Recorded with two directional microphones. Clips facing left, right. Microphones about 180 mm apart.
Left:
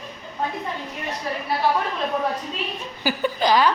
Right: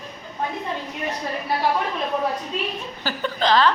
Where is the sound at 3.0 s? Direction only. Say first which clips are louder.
Left 2 dB; 10° left (ahead or behind).